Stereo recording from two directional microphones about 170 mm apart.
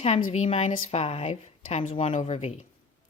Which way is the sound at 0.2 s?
40° left (ahead or behind).